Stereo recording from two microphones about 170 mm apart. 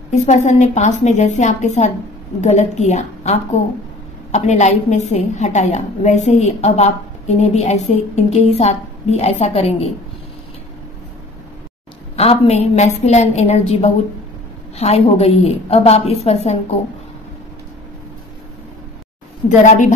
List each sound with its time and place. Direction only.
0.1 s a woman's voice: 45° left (ahead or behind)
12.2 s a woman's voice: 40° left (ahead or behind)
19.6 s a woman's voice: 45° left (ahead or behind)